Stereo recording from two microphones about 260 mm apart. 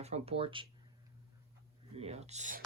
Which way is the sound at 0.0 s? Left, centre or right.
Right.